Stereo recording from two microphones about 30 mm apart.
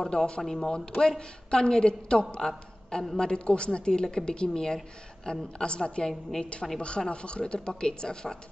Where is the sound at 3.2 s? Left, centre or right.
Left.